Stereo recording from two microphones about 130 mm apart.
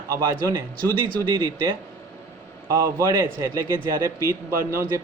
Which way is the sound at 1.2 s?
25° right (ahead or behind).